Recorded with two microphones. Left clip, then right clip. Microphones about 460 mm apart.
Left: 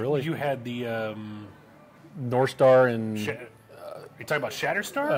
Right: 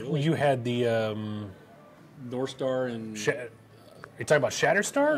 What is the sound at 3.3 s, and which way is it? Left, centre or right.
Speech, right.